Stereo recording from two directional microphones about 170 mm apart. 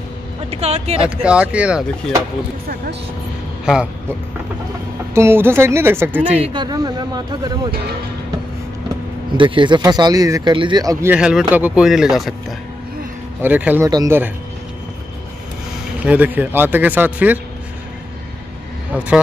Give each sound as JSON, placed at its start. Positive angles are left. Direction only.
{"t": 0.5, "sound": "speech", "side_deg": -40}
{"t": 1.0, "sound": "speech", "side_deg": -5}
{"t": 3.6, "sound": "speech", "side_deg": -5}
{"t": 5.1, "sound": "speech", "side_deg": -15}
{"t": 6.4, "sound": "speech", "side_deg": -25}
{"t": 9.4, "sound": "speech", "side_deg": -30}
{"t": 11.1, "sound": "speech", "side_deg": -5}
{"t": 13.8, "sound": "speech", "side_deg": -20}
{"t": 16.0, "sound": "speech", "side_deg": -10}